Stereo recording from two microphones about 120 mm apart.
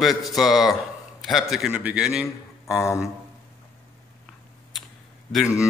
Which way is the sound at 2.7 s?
25° left (ahead or behind).